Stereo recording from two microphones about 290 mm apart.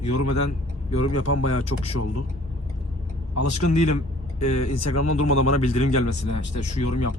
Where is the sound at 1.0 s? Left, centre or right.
Left.